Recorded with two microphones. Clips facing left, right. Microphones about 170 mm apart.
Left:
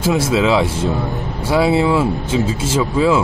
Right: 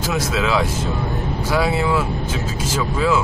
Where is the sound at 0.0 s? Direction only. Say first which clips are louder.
Left 6 dB; 25° left (ahead or behind).